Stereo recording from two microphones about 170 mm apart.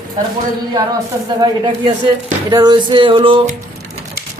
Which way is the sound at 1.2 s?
25° right (ahead or behind).